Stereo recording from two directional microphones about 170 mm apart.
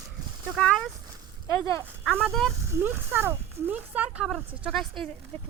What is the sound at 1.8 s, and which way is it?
Speech, 10° right (ahead or behind).